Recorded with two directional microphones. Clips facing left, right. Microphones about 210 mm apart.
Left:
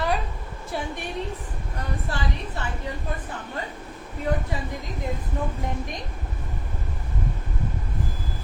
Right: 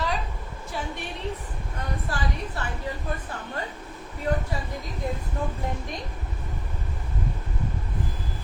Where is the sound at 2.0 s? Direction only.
25° left (ahead or behind).